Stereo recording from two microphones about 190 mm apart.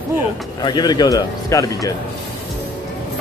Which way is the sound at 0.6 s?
20° left (ahead or behind).